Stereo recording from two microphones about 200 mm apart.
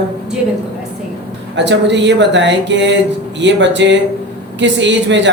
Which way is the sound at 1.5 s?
60° right (ahead or behind).